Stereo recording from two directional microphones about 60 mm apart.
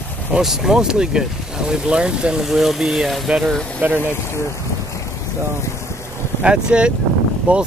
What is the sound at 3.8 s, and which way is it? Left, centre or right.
Speech, right.